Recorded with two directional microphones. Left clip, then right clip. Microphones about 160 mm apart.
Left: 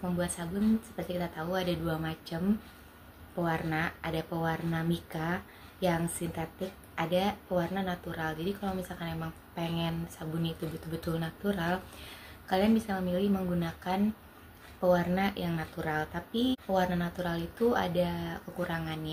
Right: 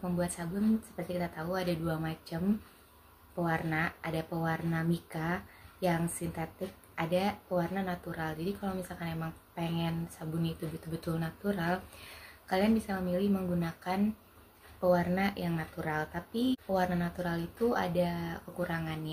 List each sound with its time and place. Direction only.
0.4 s a woman's voice: centre (ahead or behind)